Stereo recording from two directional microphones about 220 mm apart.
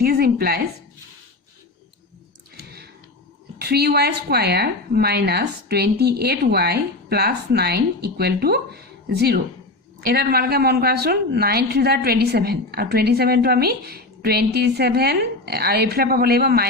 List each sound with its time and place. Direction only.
0.0 s a woman's voice: 45° right (ahead or behind)
3.6 s a woman's voice: 45° right (ahead or behind)